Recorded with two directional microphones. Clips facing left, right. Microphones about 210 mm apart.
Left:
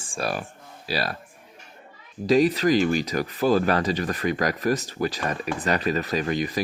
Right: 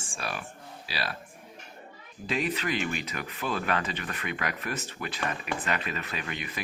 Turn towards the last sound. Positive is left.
turn(degrees=35)  # may be behind; listen again after turning